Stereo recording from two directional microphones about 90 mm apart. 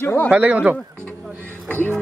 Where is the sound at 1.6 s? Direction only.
20° left (ahead or behind).